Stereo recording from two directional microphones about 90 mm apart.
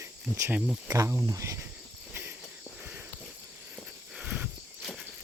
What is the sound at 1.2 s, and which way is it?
Cricket, 35° right (ahead or behind).